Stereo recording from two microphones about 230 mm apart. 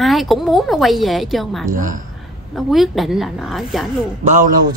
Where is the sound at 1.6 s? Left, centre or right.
Right.